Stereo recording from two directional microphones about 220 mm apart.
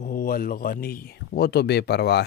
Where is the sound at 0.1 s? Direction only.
40° left (ahead or behind).